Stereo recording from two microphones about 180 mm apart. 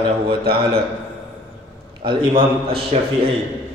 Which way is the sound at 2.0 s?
30° right (ahead or behind).